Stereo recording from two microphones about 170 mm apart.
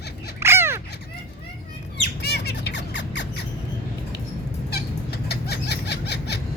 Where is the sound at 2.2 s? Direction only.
70° left (ahead or behind); by 3.4 s 90° left.